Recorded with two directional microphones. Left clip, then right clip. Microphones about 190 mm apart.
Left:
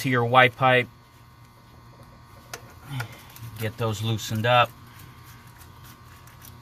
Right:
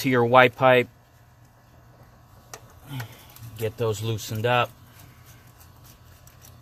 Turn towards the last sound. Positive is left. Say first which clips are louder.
# left 3 dB
turn(degrees=-45)  # may be behind; listen again after turning